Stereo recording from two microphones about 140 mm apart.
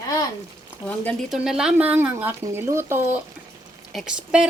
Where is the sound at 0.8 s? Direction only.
10° left (ahead or behind).